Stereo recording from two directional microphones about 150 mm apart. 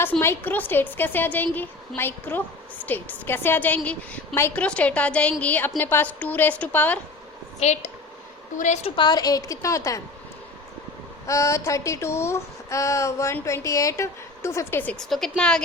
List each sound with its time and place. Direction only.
0.2 s a woman's voice: 15° left (ahead or behind)
7.6 s a woman's voice: 50° left (ahead or behind)
8.8 s speech: 30° left (ahead or behind)
11.3 s speech: 20° left (ahead or behind); by 15.6 s 5° left (ahead or behind)